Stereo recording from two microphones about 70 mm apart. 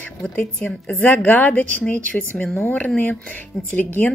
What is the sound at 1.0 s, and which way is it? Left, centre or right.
Speech, left.